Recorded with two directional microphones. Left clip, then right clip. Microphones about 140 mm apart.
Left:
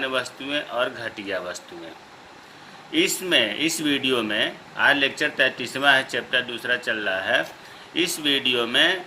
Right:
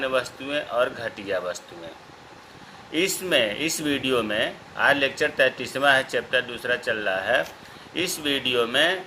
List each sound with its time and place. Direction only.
0.0 s speech: 30° right (ahead or behind)
2.9 s speech: 30° right (ahead or behind)